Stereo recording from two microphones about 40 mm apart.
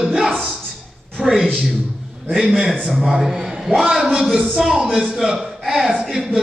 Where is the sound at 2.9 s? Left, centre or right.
Centre.